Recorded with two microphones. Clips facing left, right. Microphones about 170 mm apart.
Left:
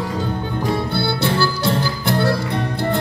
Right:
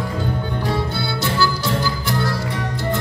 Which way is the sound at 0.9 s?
60° left (ahead or behind).